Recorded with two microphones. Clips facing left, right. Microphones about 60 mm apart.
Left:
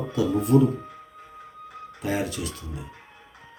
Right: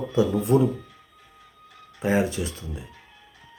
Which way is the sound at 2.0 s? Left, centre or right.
Right.